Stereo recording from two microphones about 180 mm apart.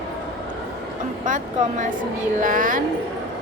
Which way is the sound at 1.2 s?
45° right (ahead or behind).